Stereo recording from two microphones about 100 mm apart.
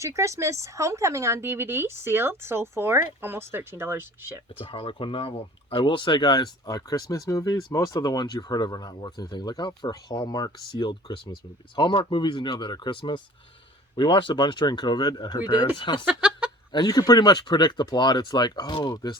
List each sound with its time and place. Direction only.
0.0 s speech: 30° right (ahead or behind)
4.6 s speech: 65° left (ahead or behind); by 15.6 s 45° left (ahead or behind)
15.8 s speech: 55° left (ahead or behind)
16.0 s speech: 10° right (ahead or behind)
16.7 s speech: 40° left (ahead or behind)